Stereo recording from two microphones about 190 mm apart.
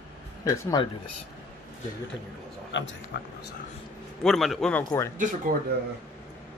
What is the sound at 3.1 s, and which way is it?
Speech, 60° left (ahead or behind).